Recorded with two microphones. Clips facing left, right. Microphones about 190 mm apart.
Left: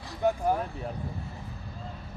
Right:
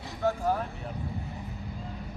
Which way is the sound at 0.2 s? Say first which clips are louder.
Left 2 dB; 15° left (ahead or behind).